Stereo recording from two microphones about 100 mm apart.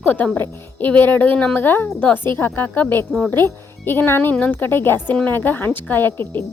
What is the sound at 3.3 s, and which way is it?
A woman's voice, 20° left (ahead or behind).